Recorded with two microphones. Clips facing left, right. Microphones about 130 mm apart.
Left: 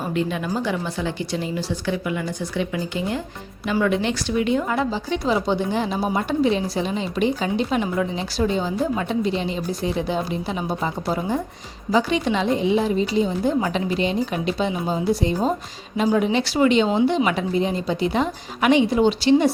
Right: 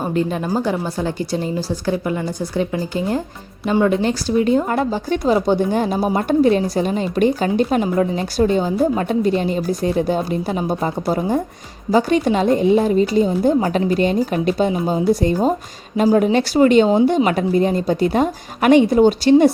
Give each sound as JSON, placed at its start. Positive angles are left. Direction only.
{"t": 0.1, "sound": "a woman's voice", "side_deg": -40}